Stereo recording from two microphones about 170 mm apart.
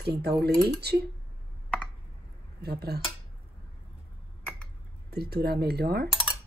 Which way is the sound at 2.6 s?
70° right (ahead or behind).